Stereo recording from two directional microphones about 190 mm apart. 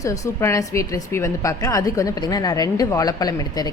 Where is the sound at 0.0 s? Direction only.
15° left (ahead or behind).